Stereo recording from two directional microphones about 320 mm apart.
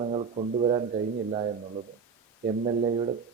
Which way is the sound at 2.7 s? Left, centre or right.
Right.